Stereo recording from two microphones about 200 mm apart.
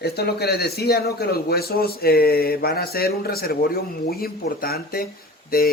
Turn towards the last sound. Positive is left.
turn(degrees=50)  # may be behind; listen again after turning